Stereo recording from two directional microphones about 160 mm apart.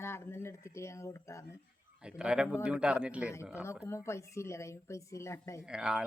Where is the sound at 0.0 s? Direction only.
15° left (ahead or behind).